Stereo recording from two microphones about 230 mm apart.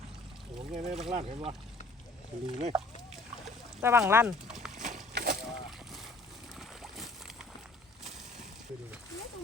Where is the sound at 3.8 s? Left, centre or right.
Centre.